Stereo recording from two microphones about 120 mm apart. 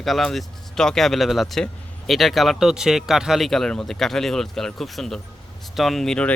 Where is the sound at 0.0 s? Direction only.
Centre (ahead or behind).